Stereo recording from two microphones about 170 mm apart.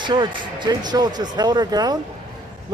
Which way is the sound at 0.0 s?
25° right (ahead or behind).